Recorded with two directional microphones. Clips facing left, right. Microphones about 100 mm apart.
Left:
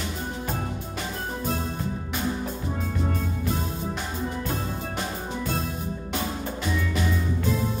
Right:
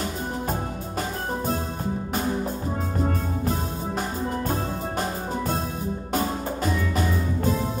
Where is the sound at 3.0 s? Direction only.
45° right (ahead or behind).